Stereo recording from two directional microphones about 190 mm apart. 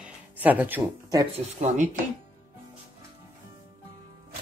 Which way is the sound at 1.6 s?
40° right (ahead or behind).